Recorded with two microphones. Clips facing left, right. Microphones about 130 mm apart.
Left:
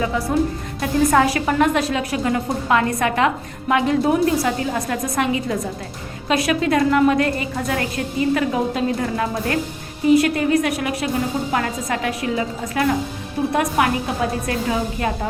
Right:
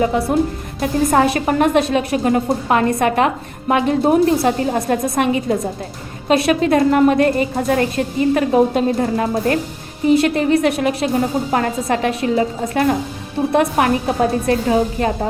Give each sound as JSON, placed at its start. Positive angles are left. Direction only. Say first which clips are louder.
{"t": 0.8, "sound": "a woman's voice", "louder": "right 1 dB", "side_deg": -30}